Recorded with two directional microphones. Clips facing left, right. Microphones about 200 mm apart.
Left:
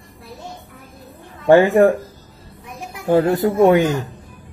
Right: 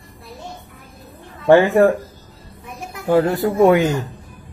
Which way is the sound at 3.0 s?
20° left (ahead or behind).